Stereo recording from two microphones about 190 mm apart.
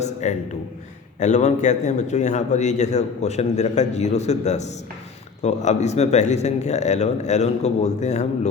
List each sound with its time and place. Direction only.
0.0 s a man's voice: 35° left (ahead or behind)